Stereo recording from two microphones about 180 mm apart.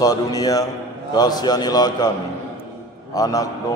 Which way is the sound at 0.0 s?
20° left (ahead or behind).